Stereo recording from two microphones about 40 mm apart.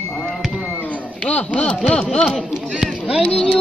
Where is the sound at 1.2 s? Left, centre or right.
Left.